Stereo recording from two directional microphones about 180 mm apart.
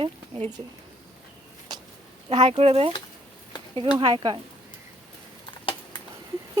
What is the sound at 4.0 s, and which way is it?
Speech, 25° right (ahead or behind).